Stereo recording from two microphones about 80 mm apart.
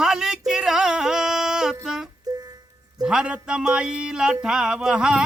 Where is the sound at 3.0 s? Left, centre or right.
Centre.